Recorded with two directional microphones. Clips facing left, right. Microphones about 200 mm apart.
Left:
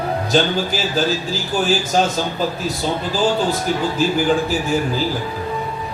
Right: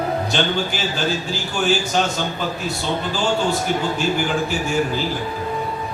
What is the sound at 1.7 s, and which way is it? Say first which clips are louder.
Speech: left 1 dB; 40° left (ahead or behind).